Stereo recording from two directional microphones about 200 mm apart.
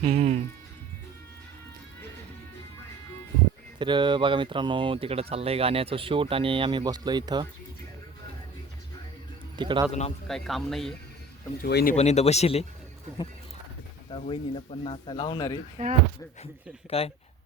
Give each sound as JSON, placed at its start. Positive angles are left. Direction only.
{"t": 0.0, "sound": "speech", "side_deg": -35}
{"t": 3.8, "sound": "speech", "side_deg": -25}
{"t": 9.6, "sound": "speech", "side_deg": -25}
{"t": 10.2, "sound": "a man's voice", "side_deg": 0}
{"t": 11.6, "sound": "speech", "side_deg": 50}
{"t": 11.9, "sound": "speech", "side_deg": 35}
{"t": 14.1, "sound": "speech", "side_deg": 30}
{"t": 15.8, "sound": "speech", "side_deg": -40}
{"t": 16.9, "sound": "speech", "side_deg": 30}